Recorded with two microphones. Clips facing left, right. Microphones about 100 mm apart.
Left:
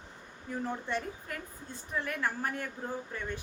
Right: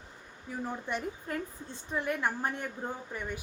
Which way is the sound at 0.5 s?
10° right (ahead or behind).